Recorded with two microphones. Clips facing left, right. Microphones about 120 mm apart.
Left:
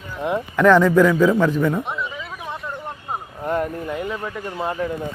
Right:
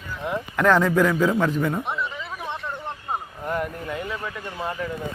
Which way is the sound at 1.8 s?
Centre (ahead or behind).